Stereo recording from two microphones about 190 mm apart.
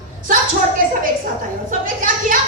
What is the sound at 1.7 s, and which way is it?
Speech, 45° right (ahead or behind).